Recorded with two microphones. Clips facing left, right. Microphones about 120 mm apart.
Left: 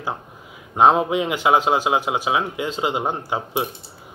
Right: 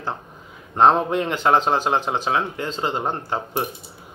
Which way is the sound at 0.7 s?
10° left (ahead or behind).